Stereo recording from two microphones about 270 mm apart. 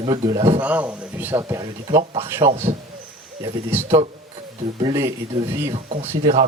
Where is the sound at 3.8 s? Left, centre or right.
Right.